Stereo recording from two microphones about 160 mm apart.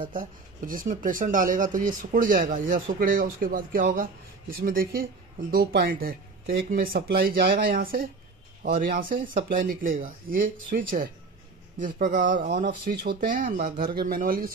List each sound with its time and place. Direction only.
0.1 s speech: 55° right (ahead or behind)
5.5 s speech: 80° right; by 12.6 s 55° right (ahead or behind)
12.9 s speech: 70° right (ahead or behind)